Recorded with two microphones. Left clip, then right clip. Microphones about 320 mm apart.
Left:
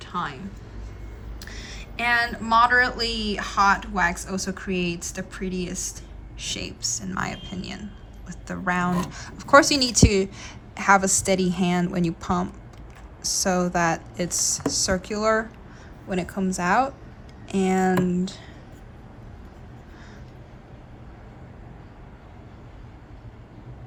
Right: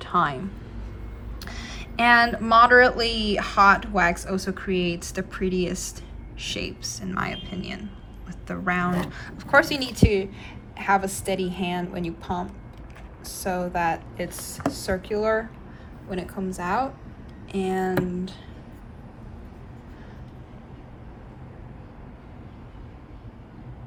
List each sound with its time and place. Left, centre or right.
0.0 s a woman's voice: centre
1.4 s a woman's voice: centre; by 18.3 s left